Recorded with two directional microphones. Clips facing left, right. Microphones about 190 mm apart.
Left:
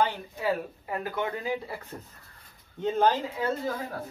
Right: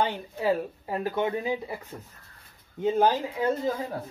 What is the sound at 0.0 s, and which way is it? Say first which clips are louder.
Speech: right 1 dB; 30° right (ahead or behind).